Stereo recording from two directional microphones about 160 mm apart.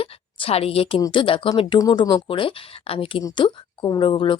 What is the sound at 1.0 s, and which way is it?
Speech, 30° left (ahead or behind).